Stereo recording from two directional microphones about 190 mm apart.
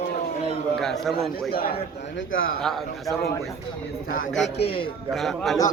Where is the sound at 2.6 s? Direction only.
Centre (ahead or behind).